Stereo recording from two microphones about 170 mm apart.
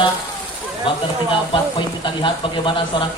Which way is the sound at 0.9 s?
30° left (ahead or behind).